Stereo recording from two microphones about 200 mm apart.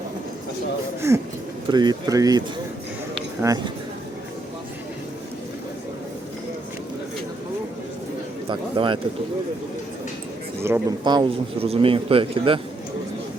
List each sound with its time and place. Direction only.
1.0 s speech: 15° right (ahead or behind)
3.4 s speech: 15° right (ahead or behind)
8.4 s speech: 25° right (ahead or behind)
10.6 s speech: 15° right (ahead or behind)